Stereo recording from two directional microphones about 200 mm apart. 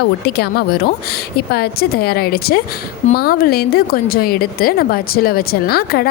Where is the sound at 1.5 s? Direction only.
50° left (ahead or behind).